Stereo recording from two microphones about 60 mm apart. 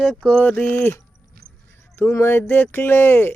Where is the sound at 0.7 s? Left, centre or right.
Left.